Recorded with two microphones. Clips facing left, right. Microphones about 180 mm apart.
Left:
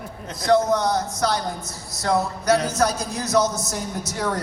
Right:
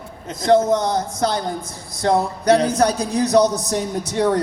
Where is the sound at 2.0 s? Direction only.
30° right (ahead or behind).